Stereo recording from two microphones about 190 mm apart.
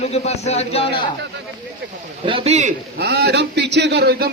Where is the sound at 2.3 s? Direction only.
25° right (ahead or behind).